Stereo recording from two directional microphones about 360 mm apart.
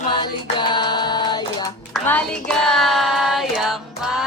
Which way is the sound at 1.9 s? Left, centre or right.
Centre.